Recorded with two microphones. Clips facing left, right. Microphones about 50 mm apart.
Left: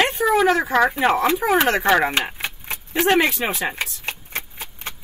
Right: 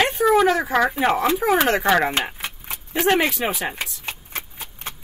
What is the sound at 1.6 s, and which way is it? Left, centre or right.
Speech, centre.